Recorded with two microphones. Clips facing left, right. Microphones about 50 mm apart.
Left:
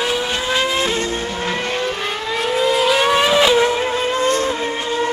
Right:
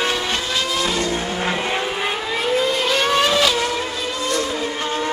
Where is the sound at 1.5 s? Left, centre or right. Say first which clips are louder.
Left 2 dB; centre.